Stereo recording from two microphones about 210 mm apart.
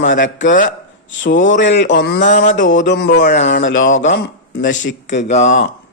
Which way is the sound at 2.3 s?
35° left (ahead or behind).